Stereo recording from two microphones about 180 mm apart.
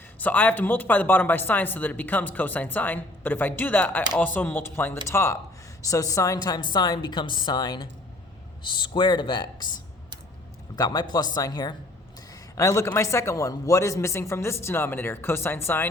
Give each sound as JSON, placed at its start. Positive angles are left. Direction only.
{"t": 0.2, "sound": "a woman's voice", "side_deg": 10}